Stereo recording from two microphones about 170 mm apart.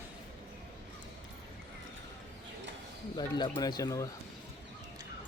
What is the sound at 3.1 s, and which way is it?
Speech, 25° left (ahead or behind).